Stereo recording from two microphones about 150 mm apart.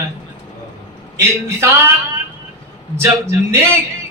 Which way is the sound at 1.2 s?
15° right (ahead or behind).